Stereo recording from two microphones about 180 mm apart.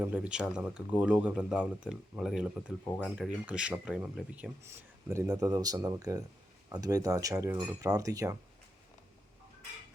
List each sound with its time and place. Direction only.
0.0 s speech: 5° right (ahead or behind)